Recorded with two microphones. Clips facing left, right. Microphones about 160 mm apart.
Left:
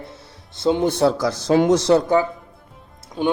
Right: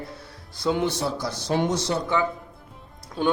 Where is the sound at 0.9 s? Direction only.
75° left (ahead or behind).